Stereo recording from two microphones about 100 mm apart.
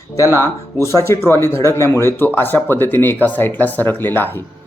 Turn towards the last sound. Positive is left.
turn(degrees=20)  # may be behind; listen again after turning